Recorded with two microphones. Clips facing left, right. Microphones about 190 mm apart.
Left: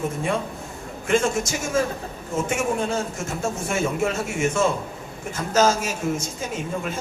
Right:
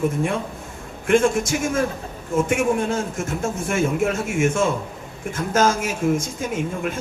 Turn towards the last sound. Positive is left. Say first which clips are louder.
# right 3 dB
turn(degrees=-50)  # may be behind; listen again after turning